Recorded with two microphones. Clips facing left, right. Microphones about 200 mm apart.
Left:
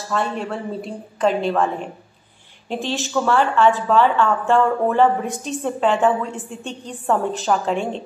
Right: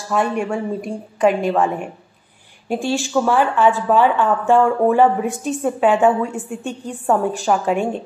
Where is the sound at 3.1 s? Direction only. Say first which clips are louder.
Even; 10° right (ahead or behind).